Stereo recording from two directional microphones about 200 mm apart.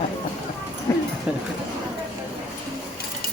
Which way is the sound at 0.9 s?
15° left (ahead or behind).